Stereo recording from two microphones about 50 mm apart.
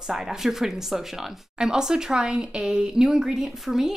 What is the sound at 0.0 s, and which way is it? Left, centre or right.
A woman's voice, centre.